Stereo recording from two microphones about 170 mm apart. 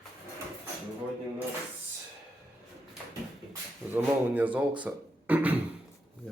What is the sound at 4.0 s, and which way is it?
Speech, 10° right (ahead or behind).